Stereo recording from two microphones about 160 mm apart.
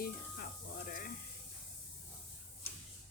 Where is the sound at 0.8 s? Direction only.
65° left (ahead or behind).